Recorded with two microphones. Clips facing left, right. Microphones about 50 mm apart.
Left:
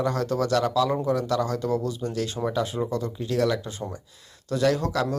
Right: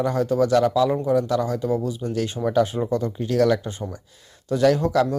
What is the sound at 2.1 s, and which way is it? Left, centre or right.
Speech, right.